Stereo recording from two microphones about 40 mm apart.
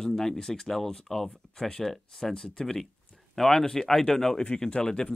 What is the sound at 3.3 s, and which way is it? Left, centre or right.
Speech, centre.